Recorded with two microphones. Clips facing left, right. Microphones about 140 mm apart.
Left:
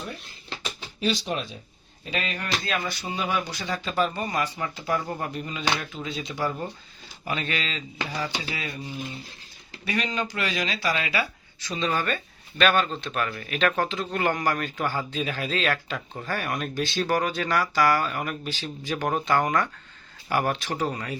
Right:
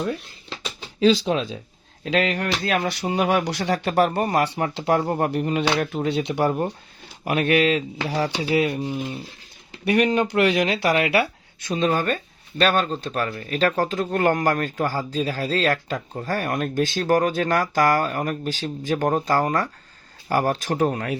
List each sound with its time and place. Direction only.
2.0 s speech: 80° right; by 21.2 s 60° right (ahead or behind)